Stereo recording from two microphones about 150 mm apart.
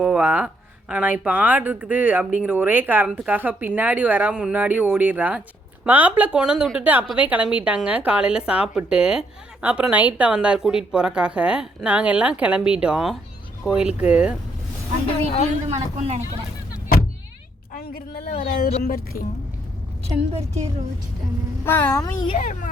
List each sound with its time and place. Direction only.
0.0 s a woman's voice: 10° right (ahead or behind)
15.7 s speech: 50° right (ahead or behind)
17.7 s speech: 85° left
20.3 s speech: 45° right (ahead or behind)
21.6 s a child's voice: 15° left (ahead or behind)
22.4 s a child's voice: 55° left (ahead or behind)